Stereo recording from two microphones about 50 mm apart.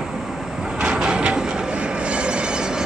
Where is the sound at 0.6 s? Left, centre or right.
Centre.